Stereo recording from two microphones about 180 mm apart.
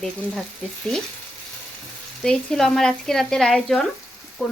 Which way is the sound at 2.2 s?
5° left (ahead or behind).